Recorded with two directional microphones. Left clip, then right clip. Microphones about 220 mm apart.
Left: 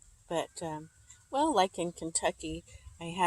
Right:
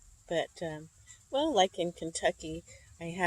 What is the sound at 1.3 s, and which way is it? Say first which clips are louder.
Speech: even; 20° left (ahead or behind).